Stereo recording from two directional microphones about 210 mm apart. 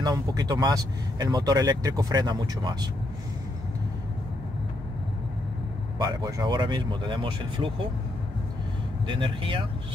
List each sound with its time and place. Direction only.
0.0 s speech: 20° right (ahead or behind)
5.9 s speech: 20° right (ahead or behind)
9.0 s speech: 25° right (ahead or behind)